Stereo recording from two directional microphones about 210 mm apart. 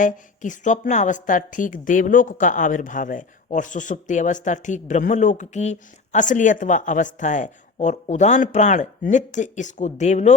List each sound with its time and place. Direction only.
0.0 s speech: 35° left (ahead or behind)